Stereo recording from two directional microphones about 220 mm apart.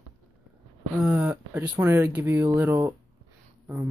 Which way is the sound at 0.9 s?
5° right (ahead or behind).